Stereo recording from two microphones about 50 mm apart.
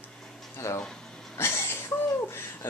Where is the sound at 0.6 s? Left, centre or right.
Left.